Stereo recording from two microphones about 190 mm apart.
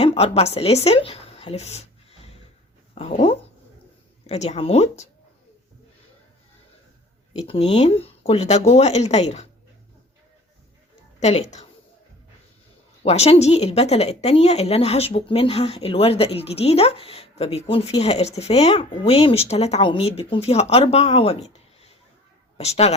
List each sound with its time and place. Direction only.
0.0 s speech: 35° left (ahead or behind)
2.9 s speech: 30° left (ahead or behind)
7.3 s speech: 30° left (ahead or behind)
11.2 s a woman's voice: 35° left (ahead or behind)
13.0 s speech: 35° left (ahead or behind)